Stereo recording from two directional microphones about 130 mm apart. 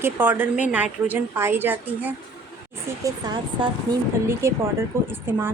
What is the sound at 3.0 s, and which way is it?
Speech, 35° right (ahead or behind).